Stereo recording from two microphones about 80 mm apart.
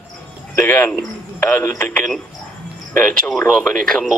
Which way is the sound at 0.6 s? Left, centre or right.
Left.